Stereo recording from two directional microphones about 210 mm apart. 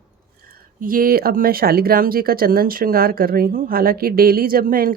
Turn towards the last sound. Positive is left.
turn(degrees=-45)  # may be behind; listen again after turning